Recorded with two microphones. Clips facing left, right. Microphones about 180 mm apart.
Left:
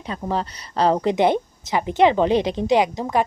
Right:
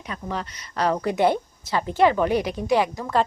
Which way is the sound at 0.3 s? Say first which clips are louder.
Left 6 dB; 30° left (ahead or behind).